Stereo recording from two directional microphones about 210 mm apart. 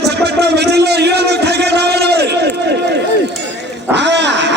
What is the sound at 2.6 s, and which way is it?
Run, 55° right (ahead or behind).